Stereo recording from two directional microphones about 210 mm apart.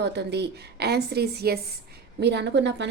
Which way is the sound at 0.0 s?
55° right (ahead or behind).